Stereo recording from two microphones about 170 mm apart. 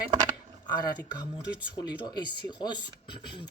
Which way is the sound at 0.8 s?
25° left (ahead or behind).